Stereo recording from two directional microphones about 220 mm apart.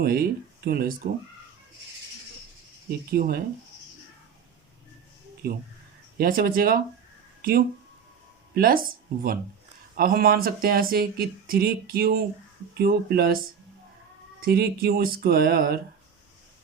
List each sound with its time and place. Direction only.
0.0 s speech: 45° right (ahead or behind)
3.1 s speech: 45° right (ahead or behind)
5.4 s speech: 45° right (ahead or behind)
8.5 s speech: 40° right (ahead or behind)
10.0 s speech: 40° right (ahead or behind)
14.4 s speech: 45° right (ahead or behind)